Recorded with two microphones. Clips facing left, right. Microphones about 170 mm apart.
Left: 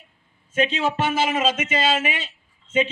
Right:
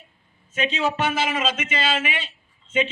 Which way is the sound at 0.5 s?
50° left (ahead or behind).